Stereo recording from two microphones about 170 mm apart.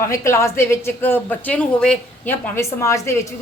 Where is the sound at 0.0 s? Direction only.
15° left (ahead or behind).